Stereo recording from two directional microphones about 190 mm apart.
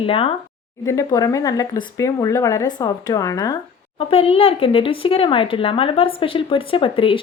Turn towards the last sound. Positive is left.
turn(degrees=30)  # may be behind; listen again after turning